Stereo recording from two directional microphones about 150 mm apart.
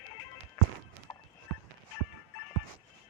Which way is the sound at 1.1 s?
20° left (ahead or behind).